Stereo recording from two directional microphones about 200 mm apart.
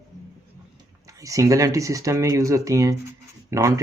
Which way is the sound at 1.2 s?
15° right (ahead or behind).